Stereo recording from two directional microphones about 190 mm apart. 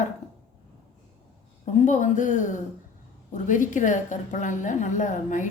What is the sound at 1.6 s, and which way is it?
A woman's voice, 40° left (ahead or behind).